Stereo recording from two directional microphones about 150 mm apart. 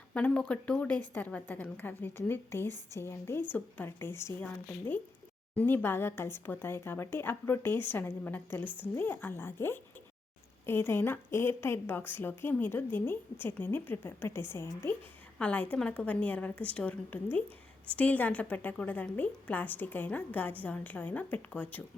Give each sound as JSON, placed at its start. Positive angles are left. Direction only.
{"t": 0.1, "sound": "a woman's voice", "side_deg": 10}